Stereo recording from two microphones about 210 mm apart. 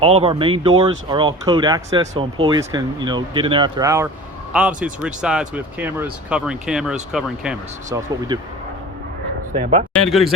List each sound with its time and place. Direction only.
0.0 s speech: 25° right (ahead or behind); by 7.5 s 5° right (ahead or behind)
9.6 s speech: 30° right (ahead or behind)
9.9 s speech: centre (ahead or behind)